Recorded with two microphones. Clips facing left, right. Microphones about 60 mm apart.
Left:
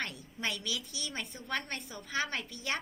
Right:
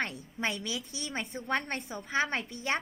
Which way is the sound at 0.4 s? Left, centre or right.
Right.